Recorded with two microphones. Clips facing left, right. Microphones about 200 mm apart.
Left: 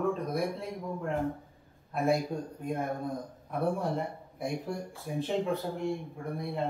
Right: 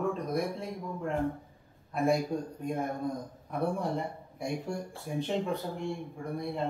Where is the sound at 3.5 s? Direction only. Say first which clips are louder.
Left 1 dB; centre (ahead or behind).